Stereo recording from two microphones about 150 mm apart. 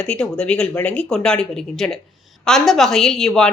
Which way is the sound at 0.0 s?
5° left (ahead or behind).